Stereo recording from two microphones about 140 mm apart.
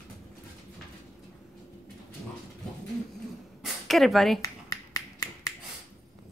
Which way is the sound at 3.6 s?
Centre (ahead or behind).